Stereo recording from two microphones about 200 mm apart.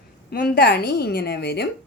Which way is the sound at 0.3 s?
50° left (ahead or behind).